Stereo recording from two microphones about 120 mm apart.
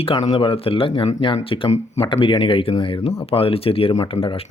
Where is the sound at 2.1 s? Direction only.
40° left (ahead or behind).